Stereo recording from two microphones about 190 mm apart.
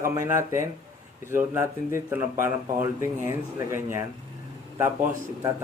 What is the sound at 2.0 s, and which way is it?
Speech, 10° right (ahead or behind).